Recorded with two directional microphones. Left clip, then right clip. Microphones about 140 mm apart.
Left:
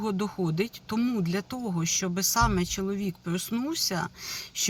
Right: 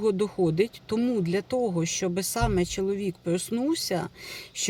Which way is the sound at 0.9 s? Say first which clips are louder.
Right 3 dB; 25° right (ahead or behind).